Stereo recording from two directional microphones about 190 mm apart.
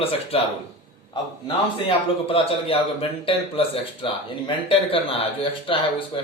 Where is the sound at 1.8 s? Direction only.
30° left (ahead or behind).